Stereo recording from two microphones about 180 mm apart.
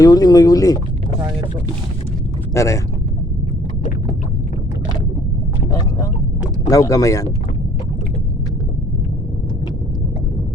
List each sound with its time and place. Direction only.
0.0 s speech: 20° left (ahead or behind)
2.5 s speech: 15° left (ahead or behind)
6.7 s speech: 20° left (ahead or behind)